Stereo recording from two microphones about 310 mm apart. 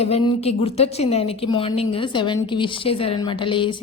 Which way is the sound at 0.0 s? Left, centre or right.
Centre.